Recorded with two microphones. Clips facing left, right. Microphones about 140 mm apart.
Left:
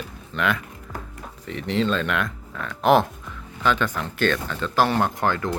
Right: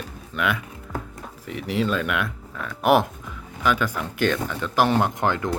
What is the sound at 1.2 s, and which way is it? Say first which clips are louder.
Speech: left 1 dB; 5° right (ahead or behind).